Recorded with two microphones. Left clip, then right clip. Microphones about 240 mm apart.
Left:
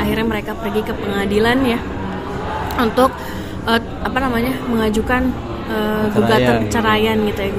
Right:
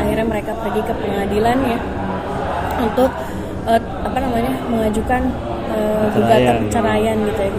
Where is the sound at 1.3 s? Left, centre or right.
Left.